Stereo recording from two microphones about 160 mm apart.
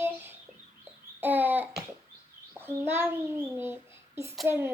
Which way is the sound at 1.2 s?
10° right (ahead or behind).